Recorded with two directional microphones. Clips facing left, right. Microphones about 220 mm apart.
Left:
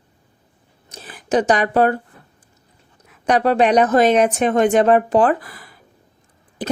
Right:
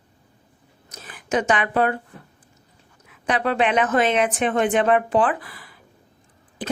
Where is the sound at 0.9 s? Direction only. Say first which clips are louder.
Left 5 dB; 35° left (ahead or behind).